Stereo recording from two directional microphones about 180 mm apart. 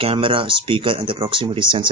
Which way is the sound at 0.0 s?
30° right (ahead or behind).